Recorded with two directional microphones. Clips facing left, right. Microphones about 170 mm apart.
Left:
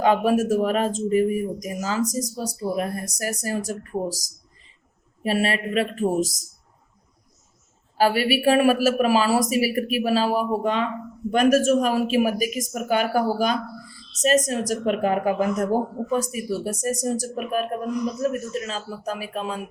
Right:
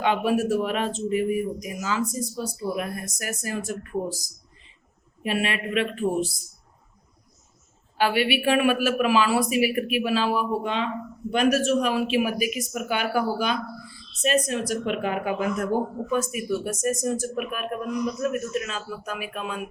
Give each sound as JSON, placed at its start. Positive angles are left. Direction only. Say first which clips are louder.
{"t": 0.0, "sound": "speech", "louder": "left 3 dB", "side_deg": 40}
{"t": 5.2, "sound": "speech", "louder": "left 3 dB", "side_deg": 35}
{"t": 7.9, "sound": "speech", "louder": "left 2 dB", "side_deg": 40}